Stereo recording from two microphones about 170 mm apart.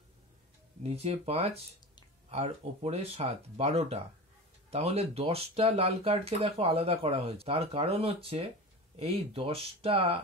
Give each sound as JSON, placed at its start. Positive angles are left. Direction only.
{"t": 0.8, "sound": "speech", "side_deg": -40}